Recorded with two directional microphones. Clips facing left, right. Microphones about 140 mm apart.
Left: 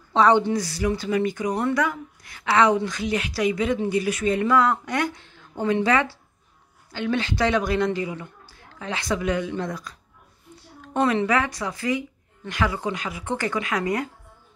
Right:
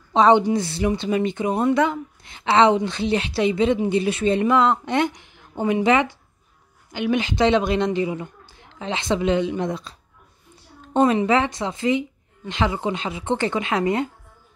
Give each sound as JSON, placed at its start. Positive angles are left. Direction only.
{"t": 0.1, "sound": "a woman's voice", "side_deg": -20}